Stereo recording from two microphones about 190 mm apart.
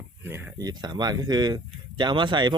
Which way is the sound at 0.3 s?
10° right (ahead or behind).